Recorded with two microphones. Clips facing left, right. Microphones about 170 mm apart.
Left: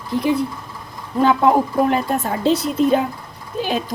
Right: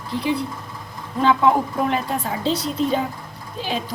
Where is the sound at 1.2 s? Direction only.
40° left (ahead or behind).